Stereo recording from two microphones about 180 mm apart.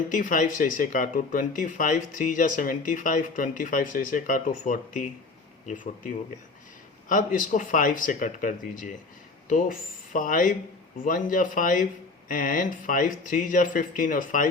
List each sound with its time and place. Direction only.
0.1 s speech: 45° left (ahead or behind)